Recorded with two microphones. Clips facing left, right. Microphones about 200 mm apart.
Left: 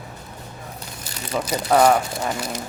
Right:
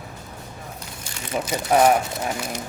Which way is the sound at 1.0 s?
35° left (ahead or behind).